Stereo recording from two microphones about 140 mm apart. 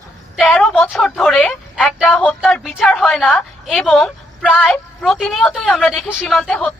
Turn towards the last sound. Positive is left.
turn(degrees=5)  # may be behind; listen again after turning